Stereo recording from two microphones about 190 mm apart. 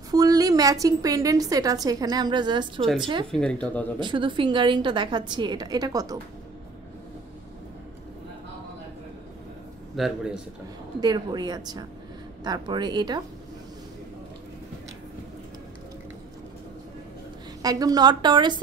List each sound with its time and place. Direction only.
0.1 s a woman's voice: 20° right (ahead or behind)
2.8 s speech: centre (ahead or behind)
4.0 s a woman's voice: 25° right (ahead or behind)
10.0 s speech: centre (ahead or behind)
11.0 s a woman's voice: 20° right (ahead or behind)
17.6 s a woman's voice: 20° right (ahead or behind)